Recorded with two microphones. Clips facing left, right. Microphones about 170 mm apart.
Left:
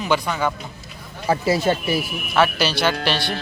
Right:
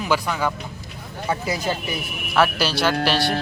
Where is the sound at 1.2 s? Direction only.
30° left (ahead or behind).